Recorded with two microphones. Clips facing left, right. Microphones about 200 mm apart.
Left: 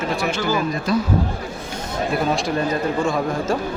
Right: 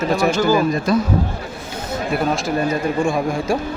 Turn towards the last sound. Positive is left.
turn(degrees=-15)  # may be behind; listen again after turning